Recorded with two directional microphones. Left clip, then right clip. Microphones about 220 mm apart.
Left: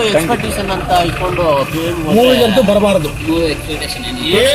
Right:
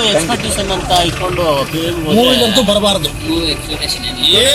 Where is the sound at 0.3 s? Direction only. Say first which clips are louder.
Even; 5° right (ahead or behind).